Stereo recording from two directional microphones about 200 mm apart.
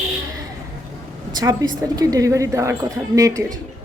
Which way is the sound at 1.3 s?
20° right (ahead or behind).